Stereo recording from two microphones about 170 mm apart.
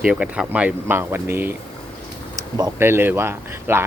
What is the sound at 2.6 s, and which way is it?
Speech, 15° right (ahead or behind).